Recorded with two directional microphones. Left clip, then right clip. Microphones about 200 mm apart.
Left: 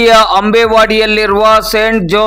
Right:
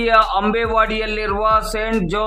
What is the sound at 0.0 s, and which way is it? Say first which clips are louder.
A man's voice: left 8 dB; 35° left (ahead or behind).